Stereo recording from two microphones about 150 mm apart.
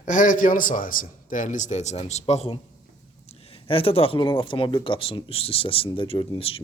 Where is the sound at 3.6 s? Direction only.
40° left (ahead or behind).